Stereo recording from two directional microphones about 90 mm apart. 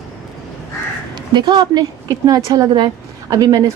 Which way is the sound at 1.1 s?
60° right (ahead or behind).